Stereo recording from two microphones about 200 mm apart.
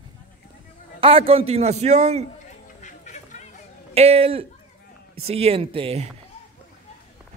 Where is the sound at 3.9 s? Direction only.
30° right (ahead or behind).